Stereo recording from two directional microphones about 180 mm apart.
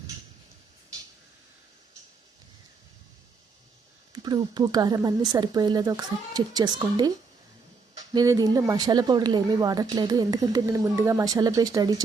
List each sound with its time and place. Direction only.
4.1 s speech: 20° right (ahead or behind)
8.1 s speech: 20° right (ahead or behind)